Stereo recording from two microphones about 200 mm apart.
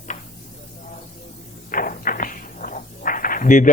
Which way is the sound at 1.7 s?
45° left (ahead or behind).